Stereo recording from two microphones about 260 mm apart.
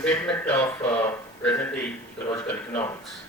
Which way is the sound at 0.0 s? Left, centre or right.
Centre.